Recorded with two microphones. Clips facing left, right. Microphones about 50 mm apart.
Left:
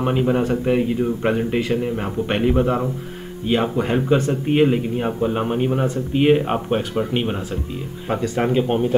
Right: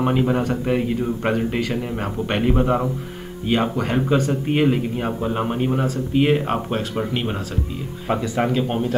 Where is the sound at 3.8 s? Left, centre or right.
Centre.